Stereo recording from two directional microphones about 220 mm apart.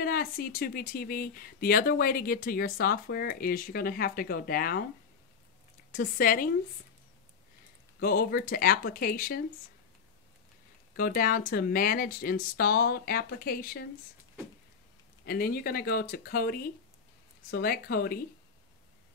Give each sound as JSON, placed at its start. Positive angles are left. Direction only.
{"t": 0.0, "sound": "speech", "side_deg": 40}
{"t": 5.9, "sound": "speech", "side_deg": 40}
{"t": 8.0, "sound": "speech", "side_deg": 45}
{"t": 11.0, "sound": "speech", "side_deg": 40}
{"t": 15.2, "sound": "speech", "side_deg": 45}